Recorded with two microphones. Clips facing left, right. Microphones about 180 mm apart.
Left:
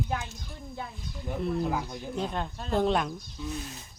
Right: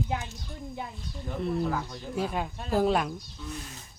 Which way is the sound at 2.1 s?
5° right (ahead or behind).